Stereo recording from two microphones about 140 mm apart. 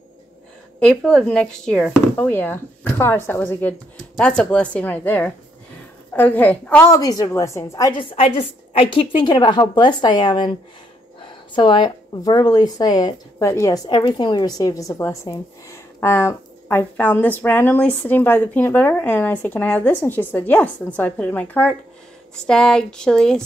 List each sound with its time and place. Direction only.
0.7 s speech: 5° left (ahead or behind)
6.9 s a woman's voice: 25° left (ahead or behind)
8.0 s a woman's voice: 40° left (ahead or behind); by 13.7 s 20° left (ahead or behind)
13.8 s speech: 30° left (ahead or behind); by 23.4 s 5° left (ahead or behind)